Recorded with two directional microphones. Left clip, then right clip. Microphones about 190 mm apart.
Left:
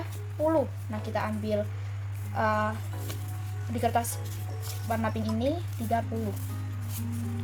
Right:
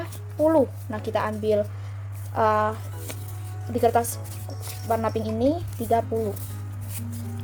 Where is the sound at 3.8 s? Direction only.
35° right (ahead or behind).